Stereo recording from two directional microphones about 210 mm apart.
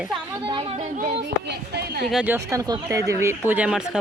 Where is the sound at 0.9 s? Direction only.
50° right (ahead or behind).